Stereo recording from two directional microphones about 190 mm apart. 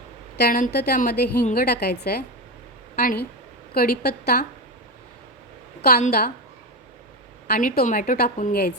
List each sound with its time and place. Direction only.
0.3 s a woman's voice: 50° left (ahead or behind)
0.9 s a woman's voice: 45° left (ahead or behind)
6.1 s a woman's voice: 55° left (ahead or behind)
7.4 s a woman's voice: 50° left (ahead or behind)